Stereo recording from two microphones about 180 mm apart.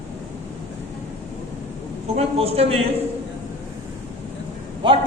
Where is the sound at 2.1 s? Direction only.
35° right (ahead or behind).